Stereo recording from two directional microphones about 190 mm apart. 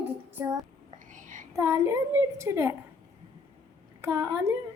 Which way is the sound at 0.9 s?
40° right (ahead or behind).